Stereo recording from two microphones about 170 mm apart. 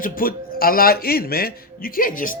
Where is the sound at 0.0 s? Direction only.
55° left (ahead or behind).